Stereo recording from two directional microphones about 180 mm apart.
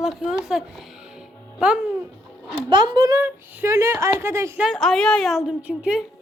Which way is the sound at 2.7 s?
25° right (ahead or behind).